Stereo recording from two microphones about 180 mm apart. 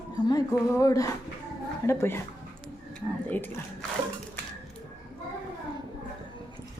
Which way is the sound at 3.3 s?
10° left (ahead or behind).